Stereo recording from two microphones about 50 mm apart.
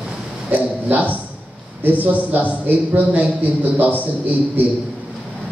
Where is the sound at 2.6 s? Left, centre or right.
Right.